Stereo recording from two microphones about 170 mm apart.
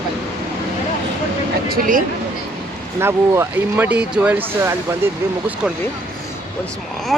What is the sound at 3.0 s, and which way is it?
Speech, 15° right (ahead or behind).